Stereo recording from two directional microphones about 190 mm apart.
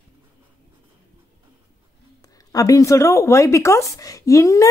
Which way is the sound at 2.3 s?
20° left (ahead or behind).